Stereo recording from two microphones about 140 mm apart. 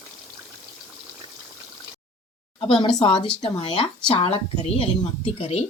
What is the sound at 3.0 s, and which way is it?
A woman's voice, 35° left (ahead or behind).